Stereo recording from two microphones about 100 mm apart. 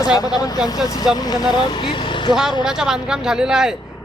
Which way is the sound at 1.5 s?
50° left (ahead or behind).